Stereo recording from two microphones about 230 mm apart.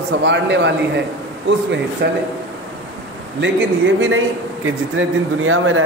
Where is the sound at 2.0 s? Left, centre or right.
Right.